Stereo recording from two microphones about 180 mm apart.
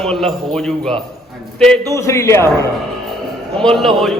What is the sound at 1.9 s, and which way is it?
Speech, 15° left (ahead or behind).